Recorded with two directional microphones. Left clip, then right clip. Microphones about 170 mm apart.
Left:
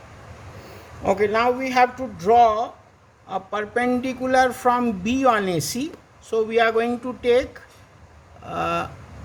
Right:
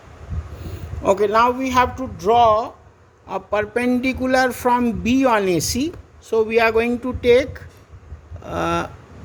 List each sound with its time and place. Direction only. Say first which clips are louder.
1.0 s speech: right 4 dB; 30° right (ahead or behind)